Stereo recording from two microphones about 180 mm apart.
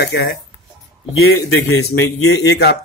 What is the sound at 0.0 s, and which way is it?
A man's voice, 65° left (ahead or behind).